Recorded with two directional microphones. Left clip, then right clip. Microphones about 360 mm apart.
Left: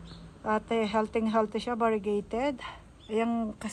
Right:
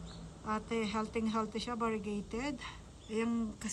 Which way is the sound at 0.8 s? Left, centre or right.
Left.